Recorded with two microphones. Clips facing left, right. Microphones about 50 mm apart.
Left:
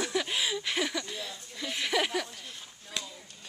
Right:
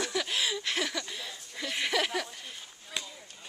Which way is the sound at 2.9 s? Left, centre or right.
Centre.